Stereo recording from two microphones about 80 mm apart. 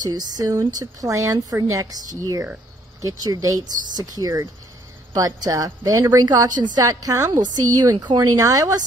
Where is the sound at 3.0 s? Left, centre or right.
Right.